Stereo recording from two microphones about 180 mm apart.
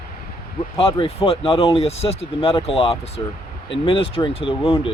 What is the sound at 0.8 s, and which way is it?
Speech, 30° left (ahead or behind).